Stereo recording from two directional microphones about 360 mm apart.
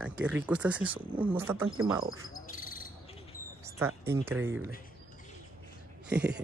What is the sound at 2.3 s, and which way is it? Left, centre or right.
Frog, left.